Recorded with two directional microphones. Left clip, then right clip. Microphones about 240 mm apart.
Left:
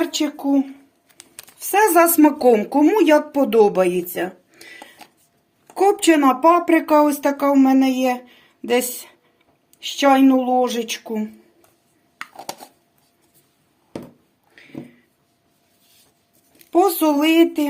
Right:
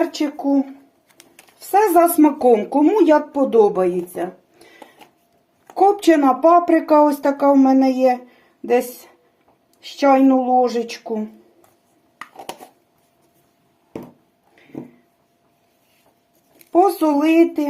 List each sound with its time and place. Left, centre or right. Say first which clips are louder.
0.0 s speech: right 1 dB; centre
1.7 s speech: right 1 dB; left
5.7 s a woman's voice: right 2 dB; centre
9.8 s speech: even; left
11.1 s speech: right 2 dB; left
16.7 s speech: right 1 dB; left